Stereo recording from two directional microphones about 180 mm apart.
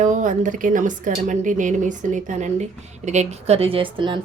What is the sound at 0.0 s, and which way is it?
A woman's voice, 45° right (ahead or behind).